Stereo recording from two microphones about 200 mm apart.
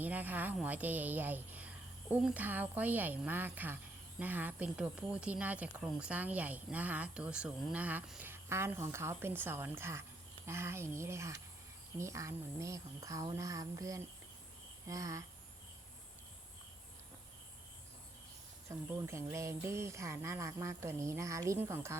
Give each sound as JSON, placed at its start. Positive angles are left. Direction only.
{"t": 0.0, "sound": "speech", "side_deg": -10}
{"t": 18.7, "sound": "speech", "side_deg": -15}